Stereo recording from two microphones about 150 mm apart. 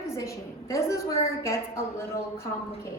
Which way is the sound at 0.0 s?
20° left (ahead or behind).